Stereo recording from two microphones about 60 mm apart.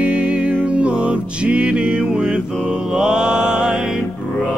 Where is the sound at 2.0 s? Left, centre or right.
Centre.